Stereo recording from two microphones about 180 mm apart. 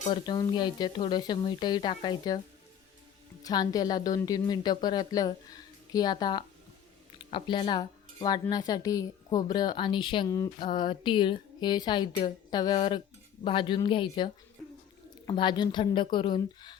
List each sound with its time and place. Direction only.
0.0 s speech: 25° left (ahead or behind)
3.4 s speech: 20° left (ahead or behind)
15.3 s speech: 25° left (ahead or behind)